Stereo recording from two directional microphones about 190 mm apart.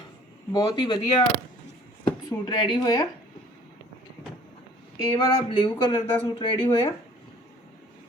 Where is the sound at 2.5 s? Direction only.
25° left (ahead or behind).